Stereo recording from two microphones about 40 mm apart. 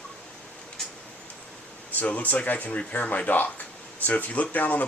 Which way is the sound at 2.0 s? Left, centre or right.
Left.